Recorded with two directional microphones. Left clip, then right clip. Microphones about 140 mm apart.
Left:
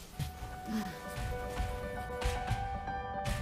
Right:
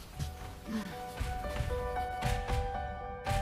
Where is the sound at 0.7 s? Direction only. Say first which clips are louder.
Left 1 dB; 40° left (ahead or behind).